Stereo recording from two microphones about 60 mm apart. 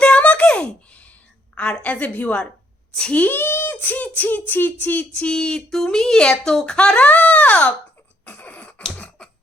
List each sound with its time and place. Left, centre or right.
0.0 s a sound: left
1.5 s a child's voice: centre
5.1 s speech: centre
6.7 s a child's voice: left
8.2 s cough: left